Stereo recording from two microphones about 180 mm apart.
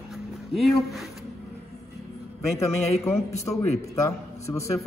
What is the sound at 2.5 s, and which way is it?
A man's voice, 15° left (ahead or behind).